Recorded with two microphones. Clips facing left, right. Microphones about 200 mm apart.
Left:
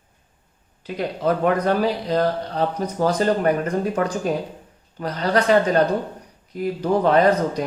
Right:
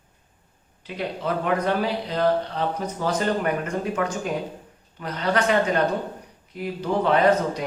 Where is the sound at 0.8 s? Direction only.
40° left (ahead or behind).